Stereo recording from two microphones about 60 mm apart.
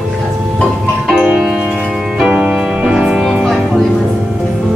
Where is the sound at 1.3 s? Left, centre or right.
Centre.